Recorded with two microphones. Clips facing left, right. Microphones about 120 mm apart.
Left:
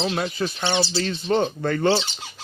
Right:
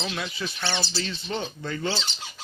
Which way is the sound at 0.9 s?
50° left (ahead or behind).